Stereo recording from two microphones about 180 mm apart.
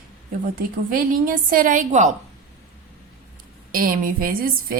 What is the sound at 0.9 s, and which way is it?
A woman's voice, 50° right (ahead or behind).